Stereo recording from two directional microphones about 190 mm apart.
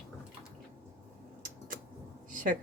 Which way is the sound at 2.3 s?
45° right (ahead or behind).